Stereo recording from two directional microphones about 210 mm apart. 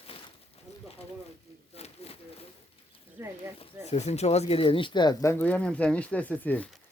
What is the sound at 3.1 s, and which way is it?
Speech, 10° right (ahead or behind).